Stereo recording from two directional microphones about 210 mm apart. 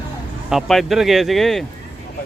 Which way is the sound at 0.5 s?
Centre (ahead or behind).